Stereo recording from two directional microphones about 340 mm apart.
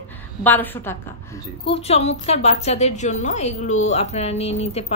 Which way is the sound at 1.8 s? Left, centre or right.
Centre.